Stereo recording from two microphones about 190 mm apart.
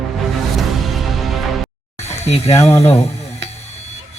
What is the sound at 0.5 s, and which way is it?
Music, centre (ahead or behind).